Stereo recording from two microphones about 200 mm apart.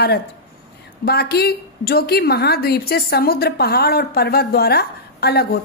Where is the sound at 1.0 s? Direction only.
50° left (ahead or behind).